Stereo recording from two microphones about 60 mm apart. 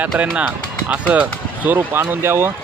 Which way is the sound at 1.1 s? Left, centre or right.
Right.